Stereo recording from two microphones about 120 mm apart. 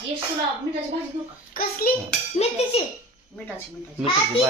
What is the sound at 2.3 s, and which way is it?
Speech, 60° left (ahead or behind).